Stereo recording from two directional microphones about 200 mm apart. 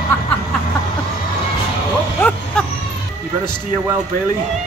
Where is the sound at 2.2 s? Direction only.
5° left (ahead or behind).